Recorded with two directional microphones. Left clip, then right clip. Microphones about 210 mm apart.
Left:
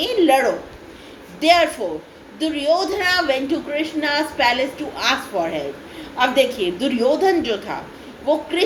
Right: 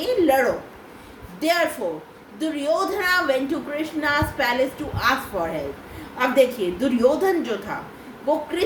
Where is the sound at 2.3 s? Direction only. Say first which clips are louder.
Left 4 dB; 25° right (ahead or behind).